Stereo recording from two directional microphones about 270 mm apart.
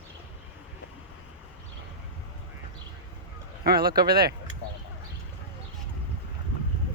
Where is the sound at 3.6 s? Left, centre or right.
Right.